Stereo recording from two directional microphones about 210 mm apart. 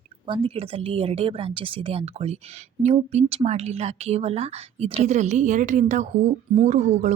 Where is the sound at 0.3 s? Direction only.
25° right (ahead or behind).